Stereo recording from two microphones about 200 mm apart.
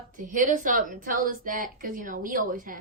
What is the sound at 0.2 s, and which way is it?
A woman's voice, 40° right (ahead or behind).